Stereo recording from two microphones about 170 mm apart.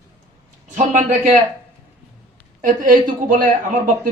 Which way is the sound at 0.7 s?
45° right (ahead or behind).